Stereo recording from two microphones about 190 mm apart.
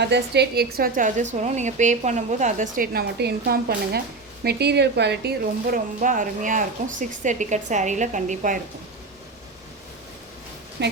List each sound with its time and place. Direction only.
0.0 s a woman's voice: 60° right (ahead or behind); by 8.5 s 40° right (ahead or behind)
10.8 s speech: 65° right (ahead or behind)